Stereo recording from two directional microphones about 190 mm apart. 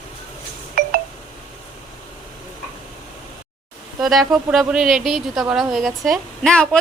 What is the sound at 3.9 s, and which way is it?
A woman's voice, centre (ahead or behind).